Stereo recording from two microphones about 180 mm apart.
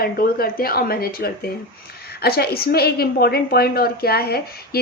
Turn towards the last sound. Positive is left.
turn(degrees=60)  # may be behind; listen again after turning